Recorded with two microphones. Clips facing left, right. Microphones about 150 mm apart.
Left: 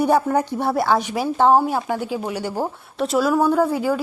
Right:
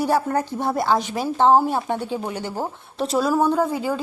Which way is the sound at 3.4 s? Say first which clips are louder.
Left 2 dB; 15° right (ahead or behind).